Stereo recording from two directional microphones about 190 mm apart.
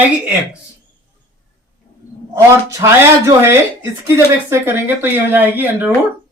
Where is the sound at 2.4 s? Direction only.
15° right (ahead or behind).